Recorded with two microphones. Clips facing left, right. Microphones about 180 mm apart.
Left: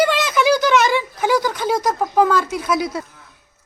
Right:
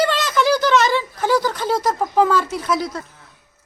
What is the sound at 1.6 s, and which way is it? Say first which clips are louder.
Speech: left 1 dB; centre (ahead or behind).